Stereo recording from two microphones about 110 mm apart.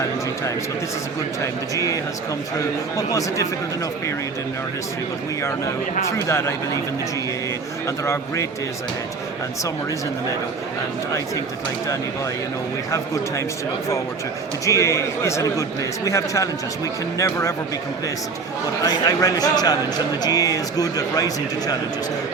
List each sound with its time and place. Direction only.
1.4 s a man's voice: 30° left (ahead or behind)
3.1 s a man's voice: 30° left (ahead or behind)
6.1 s a man's voice: 25° left (ahead or behind)
7.9 s a man's voice: 25° left (ahead or behind)
14.6 s a man's voice: 25° left (ahead or behind)
18.9 s a man's voice: 35° left (ahead or behind)